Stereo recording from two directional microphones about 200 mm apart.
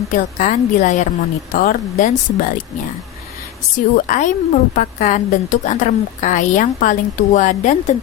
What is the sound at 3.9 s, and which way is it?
A woman's voice, 40° left (ahead or behind).